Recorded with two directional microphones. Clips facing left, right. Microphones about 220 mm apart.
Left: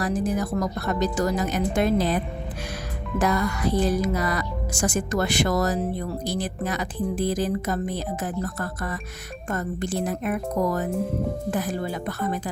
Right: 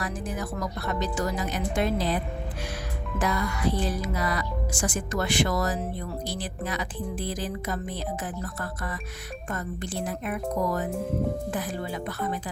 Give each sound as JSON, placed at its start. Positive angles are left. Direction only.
{"t": 0.0, "sound": "speech", "side_deg": 35}
{"t": 3.2, "sound": "speech", "side_deg": 45}